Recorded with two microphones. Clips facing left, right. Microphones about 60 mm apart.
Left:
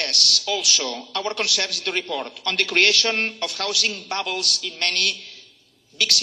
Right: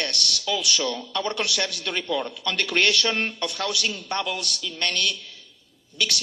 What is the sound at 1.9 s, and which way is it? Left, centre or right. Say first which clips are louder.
A man's voice: left 1 dB; left.